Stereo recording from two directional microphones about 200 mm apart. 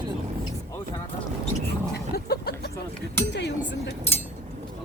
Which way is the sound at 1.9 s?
50° left (ahead or behind).